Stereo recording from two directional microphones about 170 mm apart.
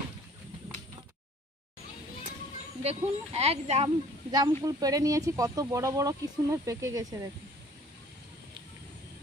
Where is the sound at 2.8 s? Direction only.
40° right (ahead or behind).